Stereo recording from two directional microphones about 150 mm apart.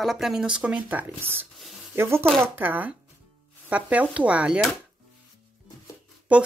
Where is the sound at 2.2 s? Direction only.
5° left (ahead or behind).